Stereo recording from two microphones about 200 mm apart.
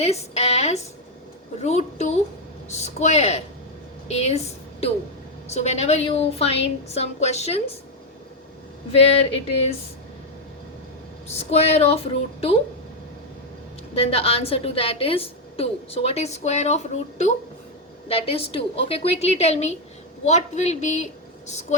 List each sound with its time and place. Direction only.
0.0 s a woman's voice: 30° left (ahead or behind)
8.9 s a woman's voice: 30° left (ahead or behind)
11.3 s a woman's voice: 30° left (ahead or behind)
13.9 s a woman's voice: 30° left (ahead or behind)